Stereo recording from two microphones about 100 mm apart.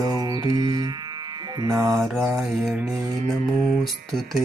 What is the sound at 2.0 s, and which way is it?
Mantra, centre (ahead or behind).